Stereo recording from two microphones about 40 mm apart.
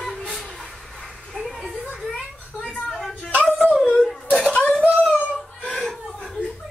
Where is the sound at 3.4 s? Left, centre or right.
Centre.